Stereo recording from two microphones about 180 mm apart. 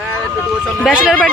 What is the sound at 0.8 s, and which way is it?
Speech, centre (ahead or behind).